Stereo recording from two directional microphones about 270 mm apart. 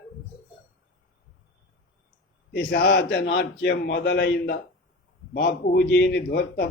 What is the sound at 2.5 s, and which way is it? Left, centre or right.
A man's voice, left.